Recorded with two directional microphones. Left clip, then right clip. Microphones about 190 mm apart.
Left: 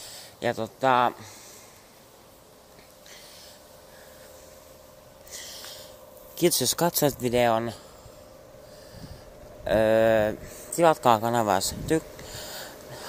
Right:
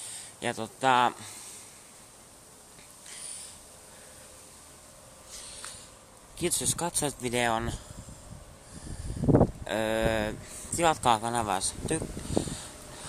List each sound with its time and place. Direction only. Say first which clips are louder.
0.1 s speech: left 5 dB; 5° left (ahead or behind)
6.3 s speech: left 8 dB; 25° left (ahead or behind)
9.7 s speech: left 8 dB; 10° left (ahead or behind)
10.8 s speech: left 5 dB; 10° left (ahead or behind)